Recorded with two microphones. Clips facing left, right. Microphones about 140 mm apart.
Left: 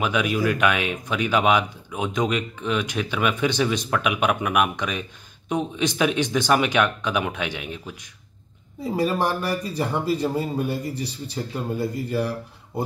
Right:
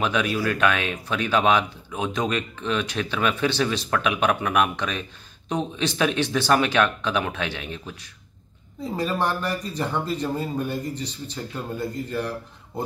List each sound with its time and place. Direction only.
0.0 s speech: 10° left (ahead or behind)